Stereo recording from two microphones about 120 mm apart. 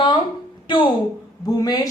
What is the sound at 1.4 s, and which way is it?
Speech, 30° left (ahead or behind).